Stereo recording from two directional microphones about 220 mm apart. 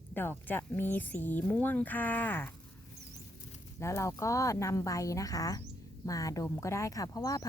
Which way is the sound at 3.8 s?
15° left (ahead or behind).